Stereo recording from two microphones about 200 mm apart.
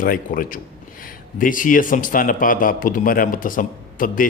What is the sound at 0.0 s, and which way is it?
A man's voice, 45° left (ahead or behind).